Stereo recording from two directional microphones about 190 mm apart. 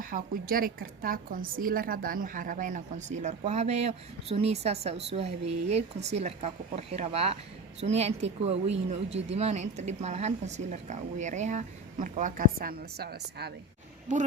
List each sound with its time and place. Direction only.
0.0 s a woman's voice: 50° right (ahead or behind)
14.1 s speech: 40° right (ahead or behind)